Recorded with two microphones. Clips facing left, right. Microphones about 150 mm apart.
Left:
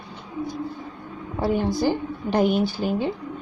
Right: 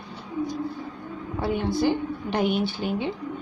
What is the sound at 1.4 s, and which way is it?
A woman's voice, 40° left (ahead or behind).